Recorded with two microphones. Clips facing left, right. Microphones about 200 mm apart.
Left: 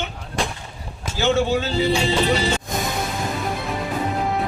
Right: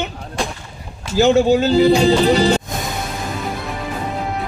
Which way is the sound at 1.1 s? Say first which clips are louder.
Right 7 dB; 40° right (ahead or behind).